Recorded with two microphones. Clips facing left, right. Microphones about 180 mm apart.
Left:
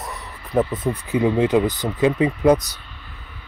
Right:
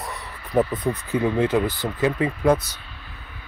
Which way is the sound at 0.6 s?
20° left (ahead or behind).